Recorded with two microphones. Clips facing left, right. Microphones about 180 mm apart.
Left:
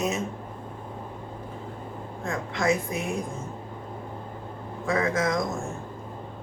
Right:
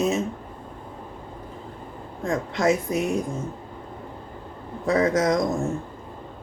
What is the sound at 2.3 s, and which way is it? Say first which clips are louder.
Speech: right 4 dB; 40° right (ahead or behind).